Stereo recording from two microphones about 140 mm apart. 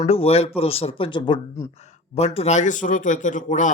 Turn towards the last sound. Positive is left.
turn(degrees=65)  # may be behind; listen again after turning